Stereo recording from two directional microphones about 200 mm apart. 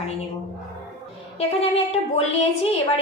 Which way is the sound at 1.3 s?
30° left (ahead or behind).